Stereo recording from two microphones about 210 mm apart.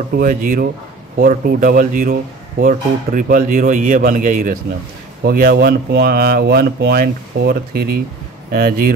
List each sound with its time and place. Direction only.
0.1 s speech: 40° right (ahead or behind)